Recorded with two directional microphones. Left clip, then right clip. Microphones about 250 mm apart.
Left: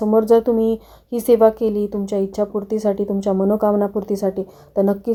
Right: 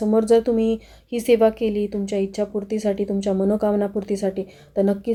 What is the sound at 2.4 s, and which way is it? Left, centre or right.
A woman's voice, left.